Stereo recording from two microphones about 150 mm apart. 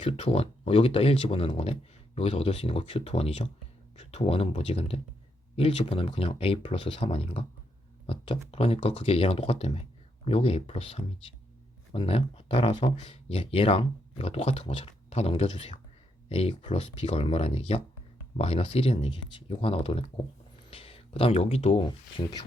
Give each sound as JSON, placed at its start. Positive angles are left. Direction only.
{"t": 0.0, "sound": "speech", "side_deg": 40}